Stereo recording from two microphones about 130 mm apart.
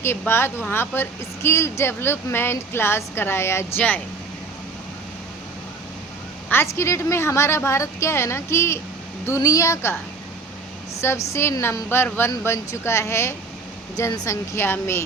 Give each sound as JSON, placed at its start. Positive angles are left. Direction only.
{"t": 0.0, "sound": "speech", "side_deg": 20}
{"t": 6.5, "sound": "speech", "side_deg": 20}
{"t": 11.0, "sound": "speech", "side_deg": 20}